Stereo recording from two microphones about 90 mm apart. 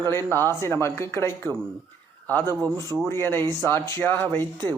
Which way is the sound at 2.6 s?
40° right (ahead or behind).